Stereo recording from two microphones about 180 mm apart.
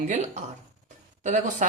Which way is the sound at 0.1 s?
40° right (ahead or behind).